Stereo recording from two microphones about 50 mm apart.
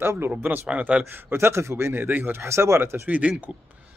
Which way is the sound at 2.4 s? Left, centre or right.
Right.